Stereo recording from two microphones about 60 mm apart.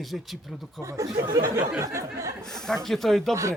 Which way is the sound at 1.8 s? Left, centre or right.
Right.